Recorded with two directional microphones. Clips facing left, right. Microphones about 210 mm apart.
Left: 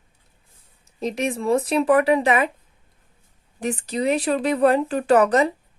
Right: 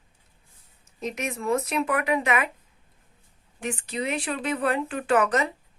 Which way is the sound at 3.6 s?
35° left (ahead or behind).